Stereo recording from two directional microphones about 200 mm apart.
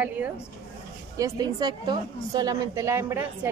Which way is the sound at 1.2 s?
20° right (ahead or behind).